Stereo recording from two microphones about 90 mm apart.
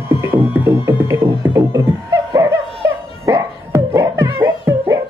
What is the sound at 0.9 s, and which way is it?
Music, 35° right (ahead or behind).